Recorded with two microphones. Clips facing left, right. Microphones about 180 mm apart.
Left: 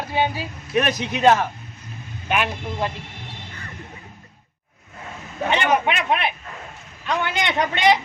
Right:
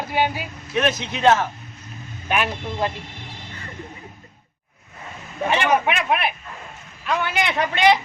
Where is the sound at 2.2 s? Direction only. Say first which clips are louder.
Even; centre (ahead or behind).